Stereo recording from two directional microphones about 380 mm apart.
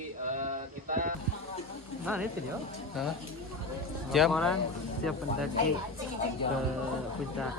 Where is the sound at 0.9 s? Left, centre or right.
Right.